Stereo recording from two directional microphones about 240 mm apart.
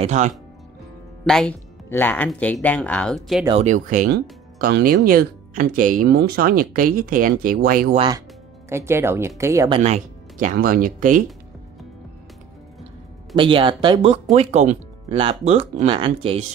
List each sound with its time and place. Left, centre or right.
0.0 s speech: right
1.2 s speech: centre
3.4 s speech: right
8.6 s speech: centre
9.8 s speech: right
13.4 s speech: right